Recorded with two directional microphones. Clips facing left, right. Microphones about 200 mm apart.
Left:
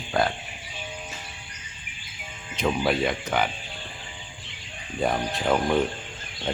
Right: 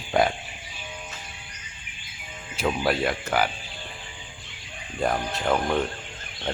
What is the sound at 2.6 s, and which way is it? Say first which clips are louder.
Speech: left 1 dB; centre (ahead or behind).